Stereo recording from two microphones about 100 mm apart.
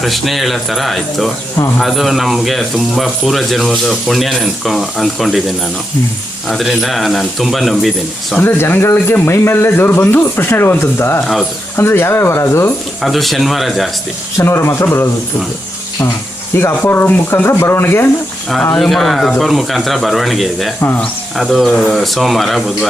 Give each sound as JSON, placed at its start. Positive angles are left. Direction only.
{"t": 0.0, "sound": "speech", "side_deg": 0}
{"t": 8.4, "sound": "speech", "side_deg": 20}
{"t": 13.0, "sound": "speech", "side_deg": 0}
{"t": 14.3, "sound": "speech", "side_deg": 25}
{"t": 16.6, "sound": "speech", "side_deg": 20}
{"t": 18.8, "sound": "speech", "side_deg": 0}